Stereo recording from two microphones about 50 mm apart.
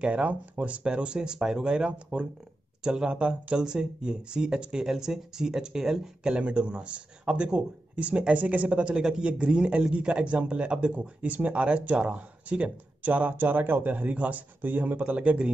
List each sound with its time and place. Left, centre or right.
0.0 s speech: right; by 6.3 s centre
6.3 s speech: right